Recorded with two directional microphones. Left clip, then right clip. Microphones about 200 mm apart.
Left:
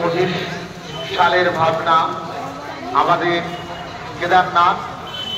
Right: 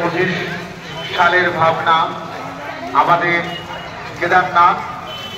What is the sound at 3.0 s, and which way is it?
Speech, 10° left (ahead or behind).